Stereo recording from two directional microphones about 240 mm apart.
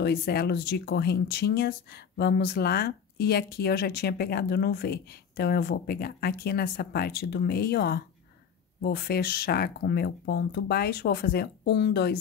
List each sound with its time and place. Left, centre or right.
0.0 s speech: left